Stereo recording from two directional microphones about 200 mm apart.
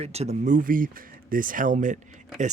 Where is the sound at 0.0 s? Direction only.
30° right (ahead or behind).